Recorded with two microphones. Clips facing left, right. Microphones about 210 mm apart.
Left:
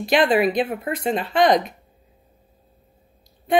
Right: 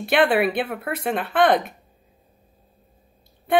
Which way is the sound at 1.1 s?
55° right (ahead or behind).